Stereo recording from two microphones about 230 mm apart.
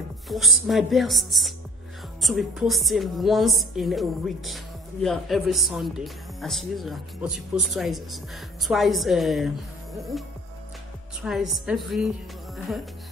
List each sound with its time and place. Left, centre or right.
0.3 s speech: centre